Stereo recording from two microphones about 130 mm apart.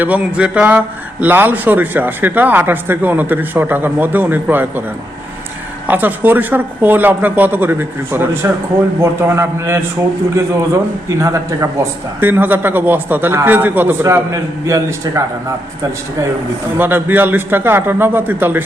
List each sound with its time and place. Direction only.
0.0 s a man's voice: 10° right (ahead or behind)
5.9 s a man's voice: 15° right (ahead or behind)
11.2 s a man's voice: 25° right (ahead or behind)
16.7 s a man's voice: 15° right (ahead or behind)